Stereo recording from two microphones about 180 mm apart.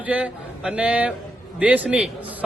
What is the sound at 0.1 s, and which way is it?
A man's voice, 5° right (ahead or behind).